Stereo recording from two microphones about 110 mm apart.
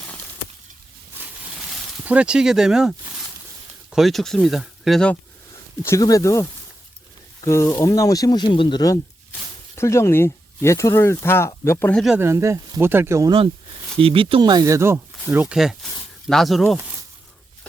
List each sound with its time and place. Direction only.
2.0 s speech: 10° right (ahead or behind)
5.8 s speech: 30° left (ahead or behind); by 8.8 s 45° left (ahead or behind)
9.7 s speech: 25° left (ahead or behind)
12.2 s speech: 25° right (ahead or behind)
14.0 s speech: 55° right (ahead or behind); by 15.5 s 15° right (ahead or behind)
15.5 s speech: 5° right (ahead or behind)